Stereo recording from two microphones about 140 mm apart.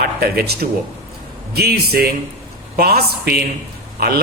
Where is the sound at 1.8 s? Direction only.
90° right.